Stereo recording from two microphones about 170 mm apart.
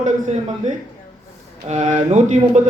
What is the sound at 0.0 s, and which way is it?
A man's voice, 45° right (ahead or behind).